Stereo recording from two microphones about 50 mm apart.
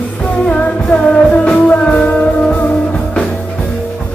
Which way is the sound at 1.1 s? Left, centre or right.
Left.